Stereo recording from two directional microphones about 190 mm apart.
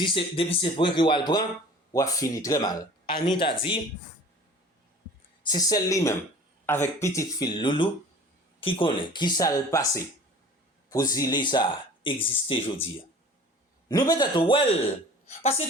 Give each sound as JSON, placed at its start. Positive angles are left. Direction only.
{"t": 0.0, "sound": "speech", "side_deg": 30}
{"t": 5.4, "sound": "speech", "side_deg": 20}
{"t": 13.8, "sound": "a woman's voice", "side_deg": 20}